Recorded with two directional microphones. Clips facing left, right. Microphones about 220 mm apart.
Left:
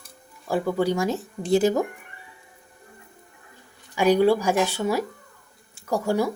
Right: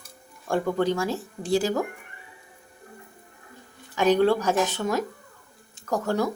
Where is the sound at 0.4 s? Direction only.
5° left (ahead or behind).